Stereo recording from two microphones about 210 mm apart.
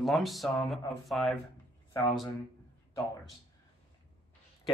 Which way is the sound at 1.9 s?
15° left (ahead or behind).